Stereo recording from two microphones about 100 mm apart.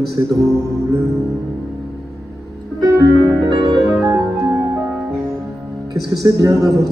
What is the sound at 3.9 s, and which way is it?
Music, 5° right (ahead or behind).